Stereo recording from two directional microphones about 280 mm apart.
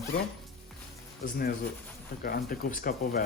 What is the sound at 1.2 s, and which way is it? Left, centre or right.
Speech, left.